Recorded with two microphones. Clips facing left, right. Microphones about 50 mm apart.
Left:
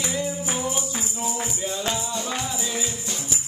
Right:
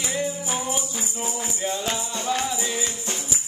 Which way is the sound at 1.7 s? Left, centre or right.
Right.